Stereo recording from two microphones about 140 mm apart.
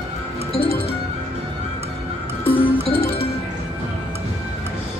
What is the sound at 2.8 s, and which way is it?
Music, 40° left (ahead or behind).